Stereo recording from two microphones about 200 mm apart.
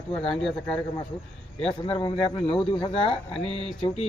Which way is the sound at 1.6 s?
25° left (ahead or behind).